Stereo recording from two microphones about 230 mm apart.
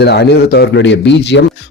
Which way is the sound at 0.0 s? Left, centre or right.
Left.